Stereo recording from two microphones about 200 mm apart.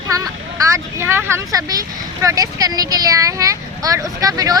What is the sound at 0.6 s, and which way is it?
Speech, 15° right (ahead or behind).